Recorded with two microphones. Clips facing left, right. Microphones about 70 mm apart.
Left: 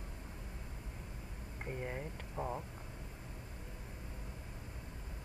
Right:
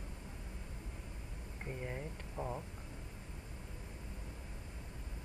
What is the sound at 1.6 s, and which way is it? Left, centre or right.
Speech, centre.